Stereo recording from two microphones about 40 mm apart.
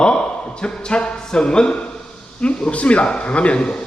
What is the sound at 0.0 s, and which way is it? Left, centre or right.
Speech, left.